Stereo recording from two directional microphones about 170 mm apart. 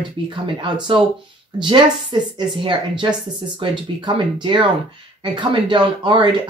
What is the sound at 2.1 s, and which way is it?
Speech, 30° right (ahead or behind).